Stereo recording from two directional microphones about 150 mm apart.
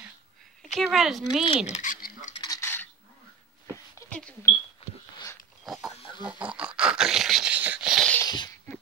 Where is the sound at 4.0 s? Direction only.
10° left (ahead or behind).